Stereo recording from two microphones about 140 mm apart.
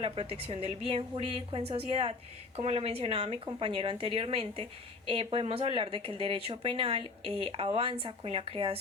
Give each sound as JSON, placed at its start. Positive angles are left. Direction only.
{"t": 0.0, "sound": "a woman's voice", "side_deg": -45}